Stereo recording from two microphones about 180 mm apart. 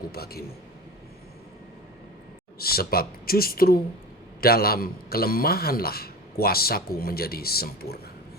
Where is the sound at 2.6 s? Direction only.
60° left (ahead or behind).